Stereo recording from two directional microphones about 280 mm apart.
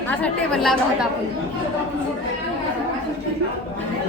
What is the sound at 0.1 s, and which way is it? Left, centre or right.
Speech, centre.